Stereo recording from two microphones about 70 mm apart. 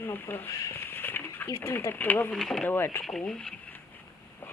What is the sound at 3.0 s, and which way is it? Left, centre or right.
Speech, centre.